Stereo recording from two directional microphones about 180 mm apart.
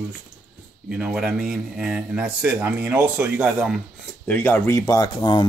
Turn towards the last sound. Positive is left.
turn(degrees=25)  # may be behind; listen again after turning